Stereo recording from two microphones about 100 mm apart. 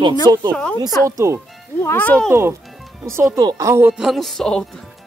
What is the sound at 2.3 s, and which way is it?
Speech, 25° right (ahead or behind).